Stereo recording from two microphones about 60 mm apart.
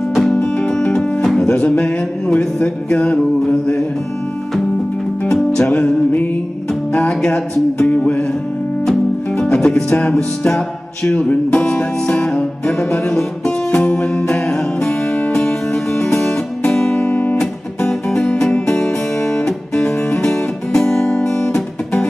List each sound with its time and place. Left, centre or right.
0.2 s music: centre
1.5 s speech: centre
2.9 s music: centre
5.7 s speech: left
7.1 s music: centre
9.4 s music: centre
11.1 s speech: left
11.7 s music: centre
17.1 s guitar: left
17.4 s music: centre